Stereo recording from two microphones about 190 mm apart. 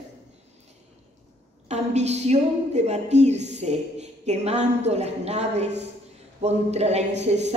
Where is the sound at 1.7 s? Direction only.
35° right (ahead or behind).